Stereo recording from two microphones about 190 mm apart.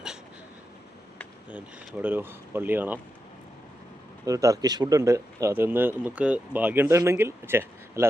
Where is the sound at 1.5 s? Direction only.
10° right (ahead or behind).